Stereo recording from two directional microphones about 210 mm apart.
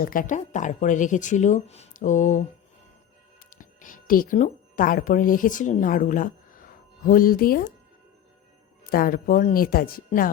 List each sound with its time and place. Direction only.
0.0 s speech: 40° left (ahead or behind)
3.5 s speech: 40° left (ahead or behind)
8.8 s speech: 45° left (ahead or behind)